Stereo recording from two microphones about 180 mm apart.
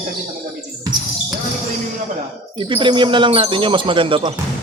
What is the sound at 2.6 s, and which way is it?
Speech, 30° right (ahead or behind).